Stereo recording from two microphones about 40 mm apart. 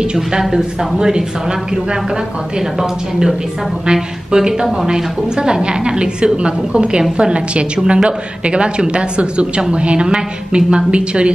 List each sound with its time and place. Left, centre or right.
0.1 s a woman's voice: centre
2.8 s a woman's voice: centre; by 11.3 s right